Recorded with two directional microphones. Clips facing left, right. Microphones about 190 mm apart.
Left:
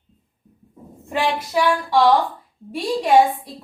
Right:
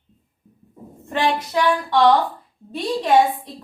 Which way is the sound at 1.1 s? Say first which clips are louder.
Even; 10° left (ahead or behind).